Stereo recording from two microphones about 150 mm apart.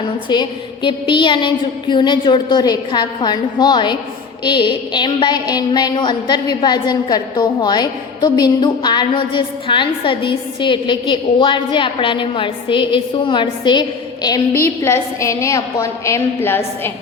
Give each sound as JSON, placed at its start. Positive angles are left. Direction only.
{"t": 0.3, "sound": "a woman's voice", "side_deg": 30}